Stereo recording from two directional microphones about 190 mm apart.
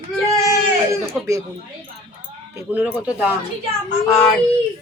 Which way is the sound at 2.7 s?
5° right (ahead or behind).